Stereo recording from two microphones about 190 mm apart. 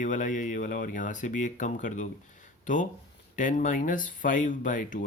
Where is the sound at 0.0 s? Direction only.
45° left (ahead or behind).